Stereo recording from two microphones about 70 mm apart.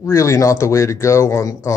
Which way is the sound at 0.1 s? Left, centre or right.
Left.